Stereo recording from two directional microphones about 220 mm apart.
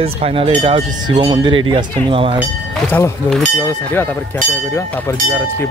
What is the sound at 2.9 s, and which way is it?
Speech, 5° left (ahead or behind).